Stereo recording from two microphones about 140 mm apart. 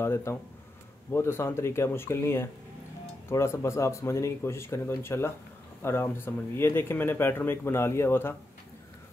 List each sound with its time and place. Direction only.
0.0 s speech: 20° left (ahead or behind)